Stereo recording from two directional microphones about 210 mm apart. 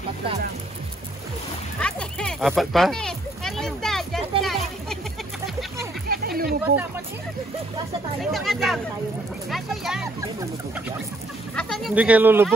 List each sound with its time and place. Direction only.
1.8 s children playing: 5° left (ahead or behind)
4.4 s music: centre (ahead or behind)
6.0 s a sound: 45° right (ahead or behind)
8.2 s speech: centre (ahead or behind)
11.5 s speech: centre (ahead or behind)